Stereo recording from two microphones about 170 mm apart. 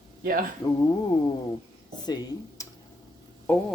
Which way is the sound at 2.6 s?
20° left (ahead or behind).